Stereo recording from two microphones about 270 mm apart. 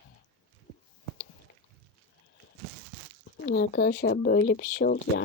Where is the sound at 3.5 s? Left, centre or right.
Left.